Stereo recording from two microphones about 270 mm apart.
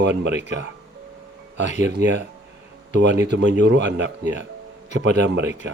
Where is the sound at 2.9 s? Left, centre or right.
Right.